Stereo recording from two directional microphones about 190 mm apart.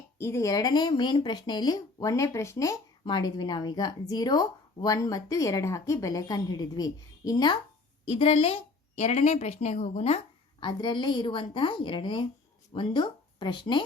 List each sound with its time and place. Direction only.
0.2 s a woman's voice: 15° left (ahead or behind)